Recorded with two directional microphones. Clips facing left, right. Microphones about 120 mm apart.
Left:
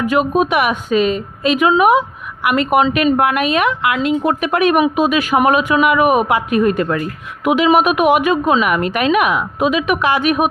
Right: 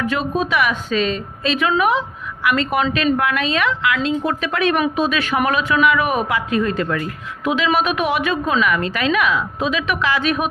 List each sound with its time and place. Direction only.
0.0 s a woman's voice: 15° left (ahead or behind)